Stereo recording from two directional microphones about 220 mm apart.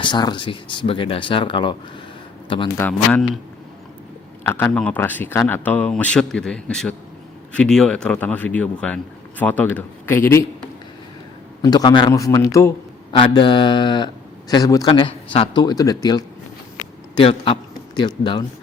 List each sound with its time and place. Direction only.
0.0 s speech: 20° left (ahead or behind)
2.7 s speech: 5° left (ahead or behind)
4.4 s speech: 10° left (ahead or behind)
11.6 s a man's voice: 20° left (ahead or behind)